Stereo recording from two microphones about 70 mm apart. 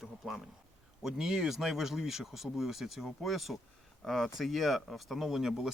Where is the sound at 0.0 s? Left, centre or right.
Centre.